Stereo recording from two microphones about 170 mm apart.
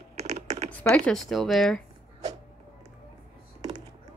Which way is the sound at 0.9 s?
5° left (ahead or behind).